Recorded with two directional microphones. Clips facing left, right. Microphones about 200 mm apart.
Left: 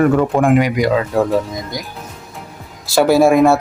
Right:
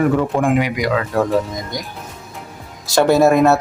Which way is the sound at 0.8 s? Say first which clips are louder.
Left 4 dB; 25° left (ahead or behind).